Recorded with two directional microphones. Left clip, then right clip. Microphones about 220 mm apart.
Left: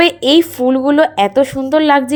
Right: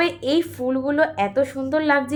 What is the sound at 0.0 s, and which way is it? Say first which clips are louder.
A woman's voice: left 10 dB; 40° left (ahead or behind).